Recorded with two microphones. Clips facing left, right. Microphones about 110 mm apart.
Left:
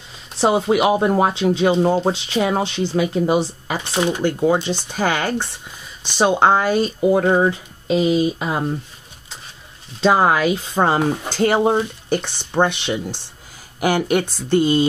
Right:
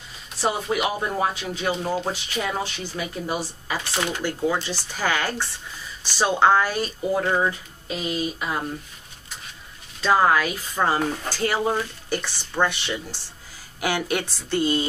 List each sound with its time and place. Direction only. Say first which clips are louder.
0.4 s speech: left 8 dB; 25° left (ahead or behind)
9.9 s speech: left 4 dB; 25° left (ahead or behind)